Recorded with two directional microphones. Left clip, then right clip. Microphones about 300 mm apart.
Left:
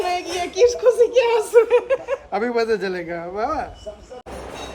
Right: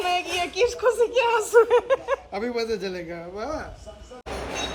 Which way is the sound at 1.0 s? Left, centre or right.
Right.